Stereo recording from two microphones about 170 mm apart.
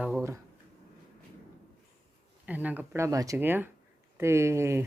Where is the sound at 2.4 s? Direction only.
10° right (ahead or behind).